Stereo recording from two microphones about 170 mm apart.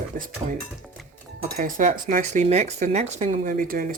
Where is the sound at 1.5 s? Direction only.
55° right (ahead or behind).